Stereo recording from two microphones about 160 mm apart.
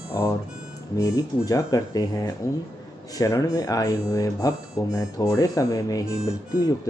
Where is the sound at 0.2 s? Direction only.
20° left (ahead or behind).